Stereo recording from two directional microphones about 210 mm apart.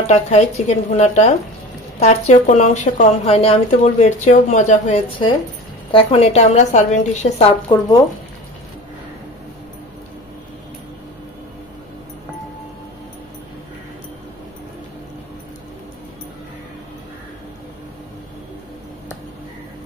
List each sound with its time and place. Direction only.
0.0 s a woman's voice: 30° left (ahead or behind)